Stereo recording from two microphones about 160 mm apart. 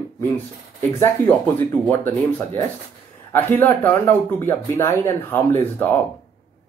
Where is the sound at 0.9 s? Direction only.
15° left (ahead or behind).